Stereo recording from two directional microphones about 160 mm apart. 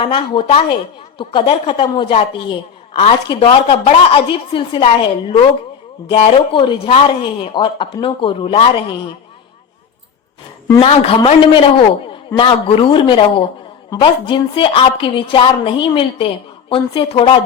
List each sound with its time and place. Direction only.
0.0 s a woman's voice: 35° left (ahead or behind)
6.1 s a woman's voice: 30° left (ahead or behind)
10.8 s a woman's voice: 35° left (ahead or behind)